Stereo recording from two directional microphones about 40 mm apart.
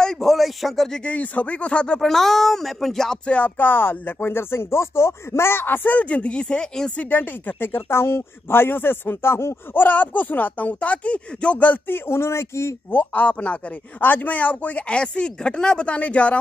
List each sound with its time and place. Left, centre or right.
0.2 s a sound: centre
1.0 s speech: left
2.0 s speech: centre
3.3 s speech: left
3.5 s speech: left
4.2 s speech: left
5.9 s speech: left
7.0 s speech: left
9.8 s speech: left
11.9 s speech: left
13.0 s speech: left
13.3 s speech: left
13.9 s speech: left